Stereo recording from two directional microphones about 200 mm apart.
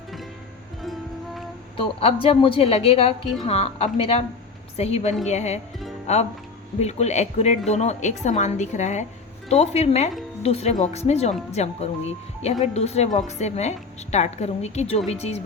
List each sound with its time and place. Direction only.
1.7 s a woman's voice: 25° left (ahead or behind)